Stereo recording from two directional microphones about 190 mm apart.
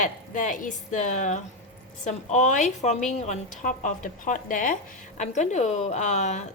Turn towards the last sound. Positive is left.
turn(degrees=40)  # may be behind; listen again after turning